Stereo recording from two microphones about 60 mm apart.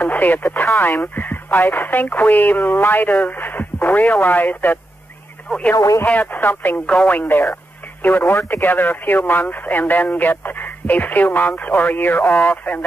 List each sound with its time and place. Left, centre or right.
0.0 s speech: left
6.0 s speech: left
6.9 s speech: left